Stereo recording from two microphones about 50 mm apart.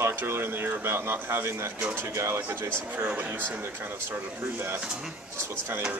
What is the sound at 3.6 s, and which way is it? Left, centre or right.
Speech, right.